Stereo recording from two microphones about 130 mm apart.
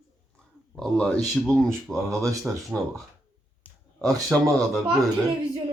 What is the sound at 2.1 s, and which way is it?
Speech, 25° right (ahead or behind).